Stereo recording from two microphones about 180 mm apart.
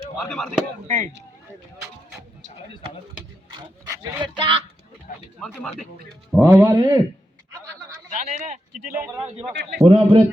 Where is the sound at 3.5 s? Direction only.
25° right (ahead or behind).